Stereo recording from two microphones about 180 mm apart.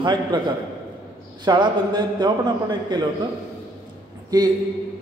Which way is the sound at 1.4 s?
25° right (ahead or behind).